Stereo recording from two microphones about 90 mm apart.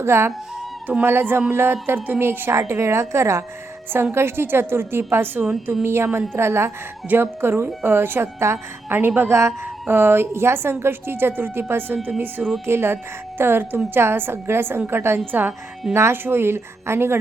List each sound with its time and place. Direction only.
0.0 s a woman's voice: 30° right (ahead or behind)
12.6 s a woman's voice: 25° right (ahead or behind)